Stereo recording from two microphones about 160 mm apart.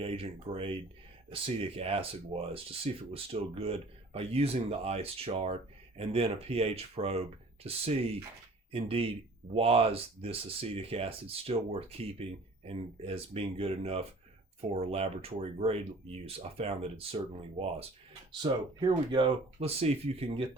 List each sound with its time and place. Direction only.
0.0 s speech: 35° right (ahead or behind)
18.4 s speech: 30° right (ahead or behind)